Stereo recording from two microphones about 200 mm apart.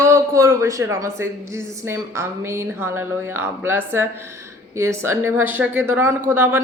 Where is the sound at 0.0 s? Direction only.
15° right (ahead or behind).